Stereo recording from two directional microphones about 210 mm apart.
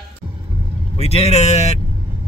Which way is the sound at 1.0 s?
30° left (ahead or behind).